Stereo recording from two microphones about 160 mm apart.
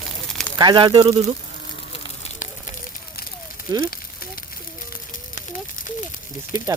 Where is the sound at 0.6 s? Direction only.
30° right (ahead or behind).